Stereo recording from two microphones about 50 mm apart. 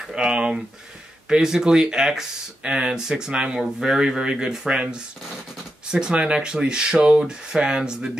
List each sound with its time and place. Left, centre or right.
0.1 s speech: centre